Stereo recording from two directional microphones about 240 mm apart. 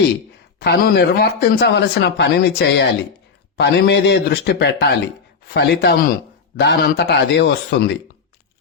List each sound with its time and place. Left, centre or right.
0.6 s speech: left